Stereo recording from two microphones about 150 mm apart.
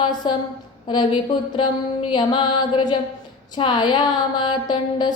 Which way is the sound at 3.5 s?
30° left (ahead or behind).